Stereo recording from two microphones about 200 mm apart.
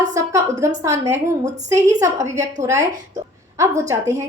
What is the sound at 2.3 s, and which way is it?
A woman's voice, 15° right (ahead or behind).